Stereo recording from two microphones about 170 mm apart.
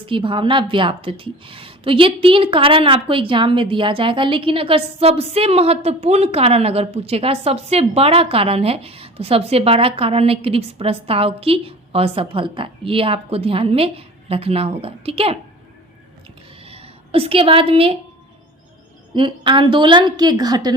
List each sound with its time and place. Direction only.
0.0 s a woman's voice: 30° right (ahead or behind)
16.6 s a sound: 35° right (ahead or behind)
19.1 s a woman's voice: 30° right (ahead or behind)